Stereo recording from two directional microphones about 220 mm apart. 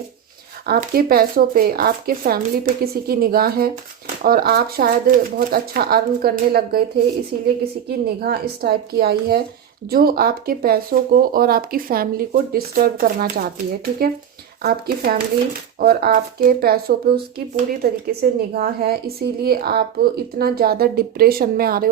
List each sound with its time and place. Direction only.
0.6 s a woman's voice: 45° right (ahead or behind)
14.6 s speech: 45° right (ahead or behind)